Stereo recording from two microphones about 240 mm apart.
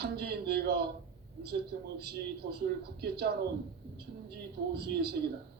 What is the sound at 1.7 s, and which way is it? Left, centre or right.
A man's voice, right.